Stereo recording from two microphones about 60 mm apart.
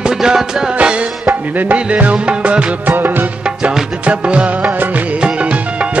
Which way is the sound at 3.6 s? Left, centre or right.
Centre.